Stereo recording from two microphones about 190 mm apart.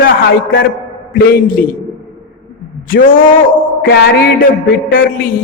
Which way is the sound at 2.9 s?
45° left (ahead or behind).